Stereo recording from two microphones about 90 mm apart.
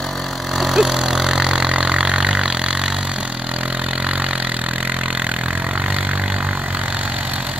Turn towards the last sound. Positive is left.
turn(degrees=-15)  # may be behind; listen again after turning